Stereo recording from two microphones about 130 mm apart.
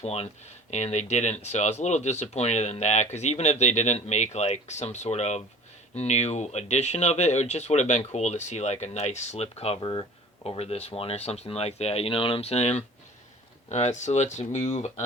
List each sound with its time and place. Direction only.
0.0 s speech: 55° left (ahead or behind)